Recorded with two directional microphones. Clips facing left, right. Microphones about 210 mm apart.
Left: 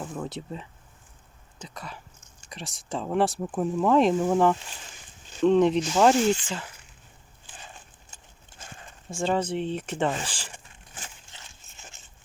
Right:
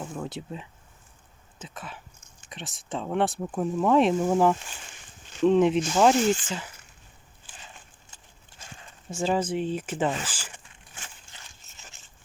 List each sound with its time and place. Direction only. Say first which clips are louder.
0.0 s speech: left 1 dB; centre (ahead or behind)
9.0 s speech: even; 5° right (ahead or behind)
11.3 s a sound: left 1 dB; 25° left (ahead or behind)